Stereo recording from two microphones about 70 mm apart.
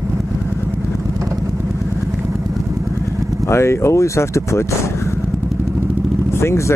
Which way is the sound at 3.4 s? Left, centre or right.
Left.